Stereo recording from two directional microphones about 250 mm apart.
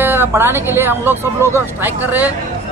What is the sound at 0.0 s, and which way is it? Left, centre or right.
A man's voice, centre.